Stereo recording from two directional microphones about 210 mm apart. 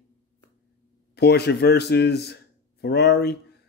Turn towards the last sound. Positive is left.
turn(degrees=50)  # may be behind; listen again after turning